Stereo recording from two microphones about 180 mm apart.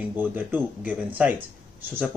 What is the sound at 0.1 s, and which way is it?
Speech, 10° right (ahead or behind).